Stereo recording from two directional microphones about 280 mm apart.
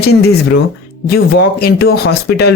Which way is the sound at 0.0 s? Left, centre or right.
Left.